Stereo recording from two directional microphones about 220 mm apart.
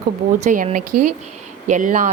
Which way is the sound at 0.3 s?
35° right (ahead or behind).